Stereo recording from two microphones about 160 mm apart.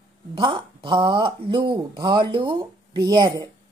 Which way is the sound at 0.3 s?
35° right (ahead or behind).